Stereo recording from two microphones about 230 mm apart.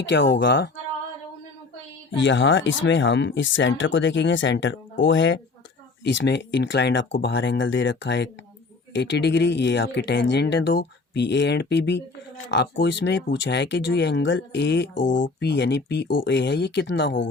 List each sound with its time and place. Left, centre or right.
0.1 s speech: left
2.1 s speech: left